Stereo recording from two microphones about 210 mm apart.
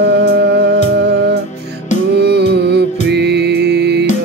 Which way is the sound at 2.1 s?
50° right (ahead or behind).